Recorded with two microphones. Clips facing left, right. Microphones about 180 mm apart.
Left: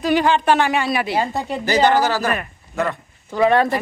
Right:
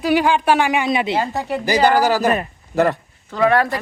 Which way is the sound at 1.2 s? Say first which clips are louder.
Right 1 dB; 20° left (ahead or behind).